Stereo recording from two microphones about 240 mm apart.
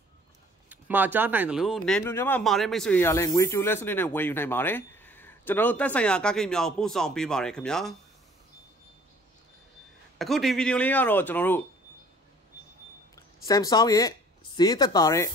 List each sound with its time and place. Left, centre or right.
0.7 s speech: centre
10.1 s speech: centre
13.1 s speech: centre